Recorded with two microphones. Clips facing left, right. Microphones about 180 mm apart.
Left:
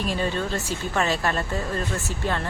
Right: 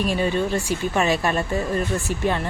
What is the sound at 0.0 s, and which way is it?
Speech, 15° right (ahead or behind).